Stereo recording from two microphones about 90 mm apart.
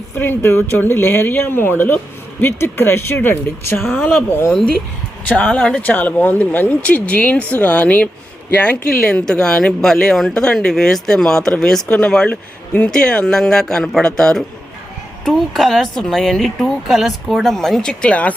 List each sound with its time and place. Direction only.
0.2 s speech: 25° left (ahead or behind)
5.3 s a woman's voice: 15° left (ahead or behind)